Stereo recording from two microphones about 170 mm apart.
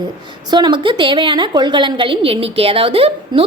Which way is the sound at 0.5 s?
25° right (ahead or behind).